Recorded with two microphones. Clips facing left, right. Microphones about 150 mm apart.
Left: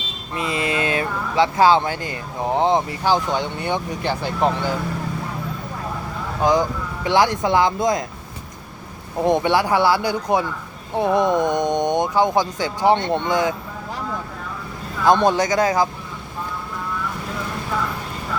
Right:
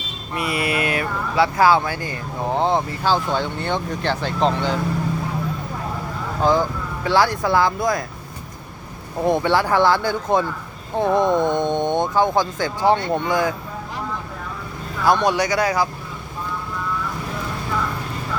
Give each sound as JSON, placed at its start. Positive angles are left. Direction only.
{"t": 0.3, "sound": "speech", "side_deg": 25}
{"t": 6.4, "sound": "speech", "side_deg": 15}
{"t": 9.2, "sound": "speech", "side_deg": 20}
{"t": 15.0, "sound": "speech", "side_deg": 25}